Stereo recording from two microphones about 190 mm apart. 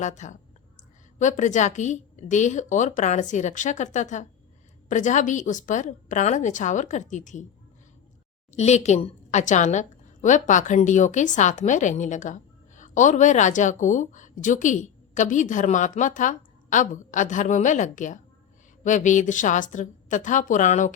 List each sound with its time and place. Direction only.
0.0 s a woman's voice: 40° left (ahead or behind)
8.5 s a woman's voice: 35° left (ahead or behind)